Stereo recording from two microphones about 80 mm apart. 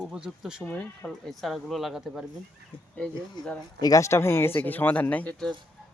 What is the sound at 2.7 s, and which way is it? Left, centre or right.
Speech, left.